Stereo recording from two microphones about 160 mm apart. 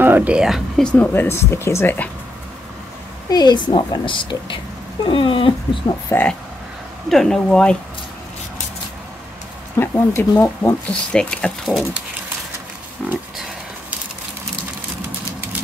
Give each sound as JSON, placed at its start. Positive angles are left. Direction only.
{"t": 0.0, "sound": "speech", "side_deg": -10}
{"t": 3.3, "sound": "a woman's voice", "side_deg": 25}
{"t": 5.0, "sound": "dog", "side_deg": 30}
{"t": 5.9, "sound": "speech", "side_deg": 15}
{"t": 7.1, "sound": "speech", "side_deg": 0}
{"t": 9.8, "sound": "speech", "side_deg": 15}
{"t": 13.0, "sound": "speech", "side_deg": 5}